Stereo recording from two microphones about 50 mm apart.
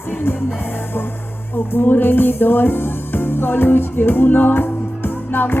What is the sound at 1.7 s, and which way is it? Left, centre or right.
Speech, left.